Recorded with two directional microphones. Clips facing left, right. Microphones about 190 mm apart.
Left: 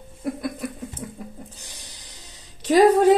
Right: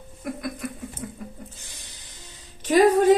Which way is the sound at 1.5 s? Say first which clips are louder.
Left 2 dB; 40° left (ahead or behind).